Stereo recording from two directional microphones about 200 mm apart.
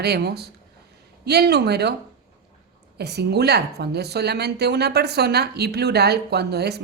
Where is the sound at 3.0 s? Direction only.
55° right (ahead or behind).